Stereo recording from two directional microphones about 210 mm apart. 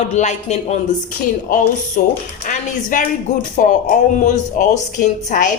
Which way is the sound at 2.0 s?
40° left (ahead or behind).